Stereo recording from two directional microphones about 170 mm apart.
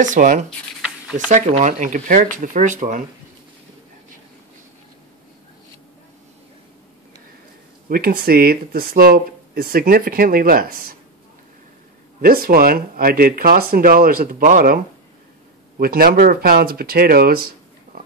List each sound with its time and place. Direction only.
0.0 s speech: 50° right (ahead or behind)
7.9 s speech: 65° right (ahead or behind)
12.2 s speech: 60° right (ahead or behind)
15.8 s speech: 60° right (ahead or behind)